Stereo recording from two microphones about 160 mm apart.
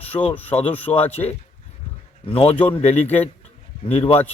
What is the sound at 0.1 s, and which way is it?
Speech, 20° left (ahead or behind).